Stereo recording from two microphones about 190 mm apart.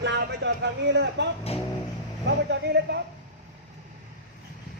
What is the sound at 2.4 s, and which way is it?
Speech, 60° right (ahead or behind).